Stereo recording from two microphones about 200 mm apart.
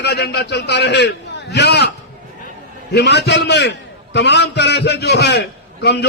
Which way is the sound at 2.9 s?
55° left (ahead or behind).